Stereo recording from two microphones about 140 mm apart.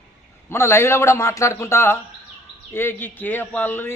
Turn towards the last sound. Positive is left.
turn(degrees=15)  # may be behind; listen again after turning